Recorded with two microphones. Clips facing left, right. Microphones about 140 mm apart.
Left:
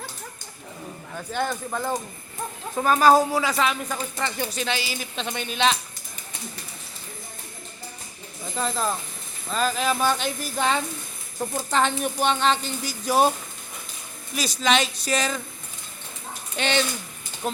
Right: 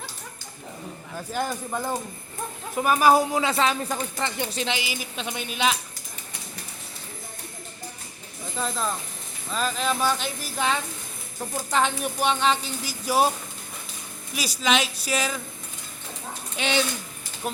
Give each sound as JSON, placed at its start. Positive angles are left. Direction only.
{"t": 1.3, "sound": "speech", "side_deg": -5}
{"t": 3.4, "sound": "a woman's voice", "side_deg": -30}
{"t": 4.9, "sound": "speech", "side_deg": -5}
{"t": 8.5, "sound": "speech", "side_deg": 0}
{"t": 14.3, "sound": "speech", "side_deg": -10}
{"t": 16.6, "sound": "speech", "side_deg": -5}